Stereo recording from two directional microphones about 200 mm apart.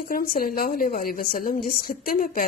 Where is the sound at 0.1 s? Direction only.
45° left (ahead or behind).